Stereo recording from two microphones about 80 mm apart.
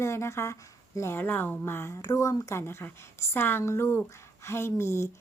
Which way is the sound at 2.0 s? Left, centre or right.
Left.